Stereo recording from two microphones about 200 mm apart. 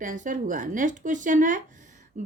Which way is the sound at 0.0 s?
40° right (ahead or behind).